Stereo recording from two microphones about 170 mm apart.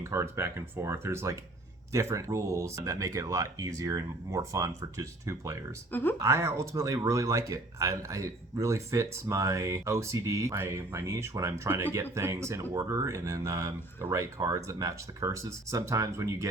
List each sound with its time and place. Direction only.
0.0 s speech: 15° right (ahead or behind)
5.9 s speech: 10° left (ahead or behind)
6.1 s speech: 15° right (ahead or behind)